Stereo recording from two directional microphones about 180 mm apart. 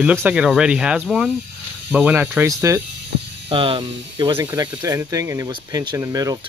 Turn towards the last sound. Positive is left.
turn(degrees=-20)  # may be behind; listen again after turning